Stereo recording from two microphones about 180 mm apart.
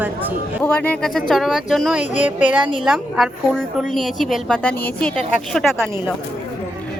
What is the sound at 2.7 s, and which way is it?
A woman's voice, centre (ahead or behind).